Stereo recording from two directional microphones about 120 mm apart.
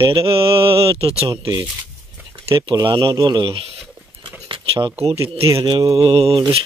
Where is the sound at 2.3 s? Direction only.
45° right (ahead or behind).